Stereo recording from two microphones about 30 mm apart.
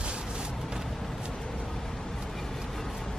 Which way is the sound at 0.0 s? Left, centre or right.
Right.